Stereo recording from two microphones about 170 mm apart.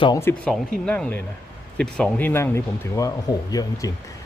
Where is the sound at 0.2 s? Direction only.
15° left (ahead or behind).